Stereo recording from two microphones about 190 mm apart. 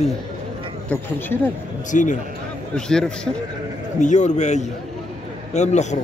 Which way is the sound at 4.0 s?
40° left (ahead or behind).